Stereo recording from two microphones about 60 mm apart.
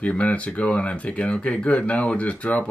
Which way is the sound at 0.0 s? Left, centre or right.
Left.